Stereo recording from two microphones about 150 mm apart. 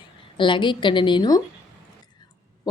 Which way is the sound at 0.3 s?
35° left (ahead or behind).